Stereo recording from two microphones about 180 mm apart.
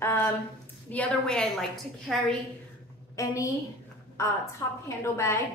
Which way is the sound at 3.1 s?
15° left (ahead or behind).